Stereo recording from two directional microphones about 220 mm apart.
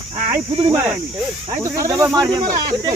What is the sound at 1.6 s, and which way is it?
Speech, 15° right (ahead or behind).